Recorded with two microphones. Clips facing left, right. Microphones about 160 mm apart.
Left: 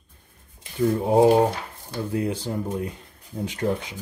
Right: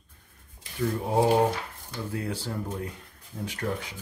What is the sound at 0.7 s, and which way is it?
Speech, 25° left (ahead or behind).